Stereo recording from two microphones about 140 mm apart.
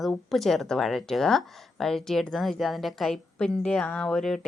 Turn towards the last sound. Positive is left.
turn(degrees=5)  # may be behind; listen again after turning